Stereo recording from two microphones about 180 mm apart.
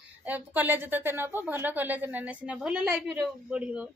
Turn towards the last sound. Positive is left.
turn(degrees=-5)  # may be behind; listen again after turning